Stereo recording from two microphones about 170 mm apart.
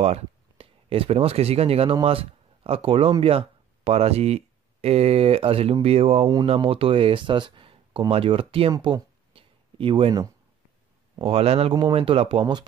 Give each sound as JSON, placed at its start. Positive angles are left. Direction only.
{"t": 0.0, "sound": "speech", "side_deg": -35}
{"t": 8.7, "sound": "a sound", "side_deg": -25}
{"t": 11.1, "sound": "speech", "side_deg": -35}